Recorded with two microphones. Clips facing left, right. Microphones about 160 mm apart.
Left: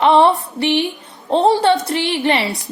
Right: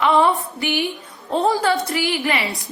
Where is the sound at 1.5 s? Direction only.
30° left (ahead or behind).